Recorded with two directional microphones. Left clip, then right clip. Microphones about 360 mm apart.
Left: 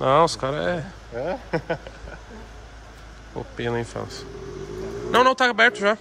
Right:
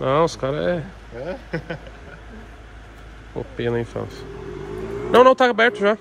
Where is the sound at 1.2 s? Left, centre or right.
Left.